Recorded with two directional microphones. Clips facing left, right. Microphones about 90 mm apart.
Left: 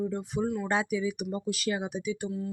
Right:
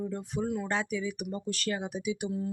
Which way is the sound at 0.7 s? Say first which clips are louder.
Left 3 dB; 15° left (ahead or behind).